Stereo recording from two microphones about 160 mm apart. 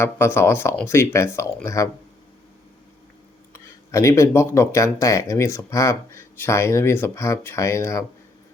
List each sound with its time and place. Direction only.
0.0 s speech: 15° left (ahead or behind)
3.5 s speech: 20° left (ahead or behind)